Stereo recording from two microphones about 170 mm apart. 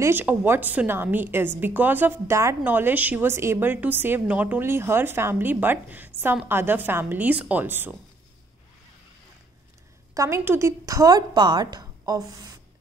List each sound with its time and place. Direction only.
0.0 s a woman's voice: 10° right (ahead or behind)
10.1 s a woman's voice: 15° right (ahead or behind)